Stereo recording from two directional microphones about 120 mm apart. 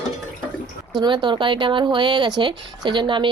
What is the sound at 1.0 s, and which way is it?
Speech, 40° right (ahead or behind).